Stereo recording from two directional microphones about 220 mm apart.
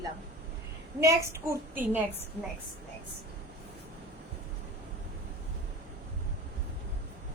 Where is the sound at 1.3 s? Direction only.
10° right (ahead or behind).